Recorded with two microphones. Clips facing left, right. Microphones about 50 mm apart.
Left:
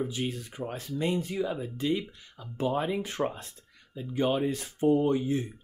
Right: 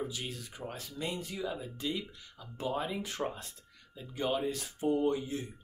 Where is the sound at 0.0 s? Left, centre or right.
Left.